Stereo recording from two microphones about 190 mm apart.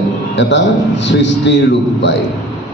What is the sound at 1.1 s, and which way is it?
Speech, 70° left (ahead or behind).